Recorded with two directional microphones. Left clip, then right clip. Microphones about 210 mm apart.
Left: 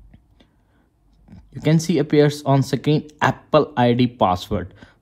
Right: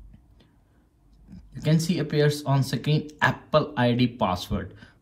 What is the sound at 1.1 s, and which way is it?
Speech, 40° left (ahead or behind).